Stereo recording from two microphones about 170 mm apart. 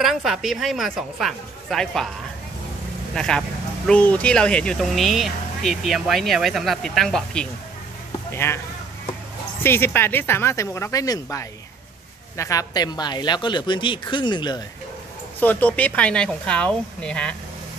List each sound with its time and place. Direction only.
0.0 s speech: centre (ahead or behind)
3.2 s speech: 5° left (ahead or behind)
8.3 s a man's voice: 15° left (ahead or behind)
9.6 s speech: 15° left (ahead or behind)
15.4 s speech: 10° left (ahead or behind)